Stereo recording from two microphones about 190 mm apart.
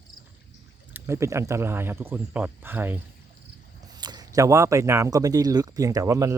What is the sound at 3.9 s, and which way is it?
Speech, 20° right (ahead or behind).